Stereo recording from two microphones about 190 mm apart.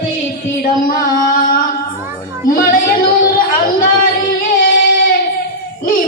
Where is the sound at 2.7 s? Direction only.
50° left (ahead or behind).